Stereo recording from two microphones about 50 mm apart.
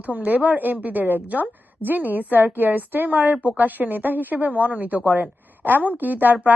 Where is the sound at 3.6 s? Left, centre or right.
Right.